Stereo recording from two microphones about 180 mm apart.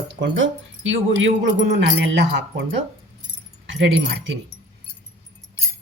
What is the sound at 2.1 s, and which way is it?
Speech, 85° right.